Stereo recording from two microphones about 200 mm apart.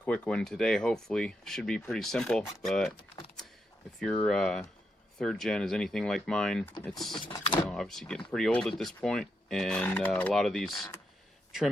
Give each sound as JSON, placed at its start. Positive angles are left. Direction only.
{"t": 0.0, "sound": "speech", "side_deg": 5}
{"t": 4.0, "sound": "speech", "side_deg": 5}
{"t": 7.3, "sound": "speech", "side_deg": 25}
{"t": 7.7, "sound": "speech", "side_deg": 0}